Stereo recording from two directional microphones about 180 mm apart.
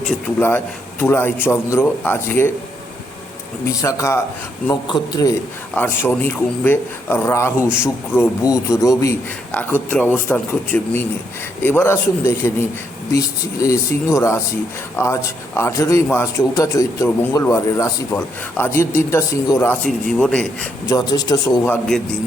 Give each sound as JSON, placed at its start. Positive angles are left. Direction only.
{"t": 0.1, "sound": "a man's voice", "side_deg": 10}
{"t": 3.8, "sound": "a man's voice", "side_deg": 15}
{"t": 5.7, "sound": "a man's voice", "side_deg": 10}
{"t": 20.8, "sound": "a man's voice", "side_deg": 20}